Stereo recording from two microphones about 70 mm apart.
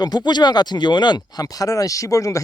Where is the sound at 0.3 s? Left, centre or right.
Left.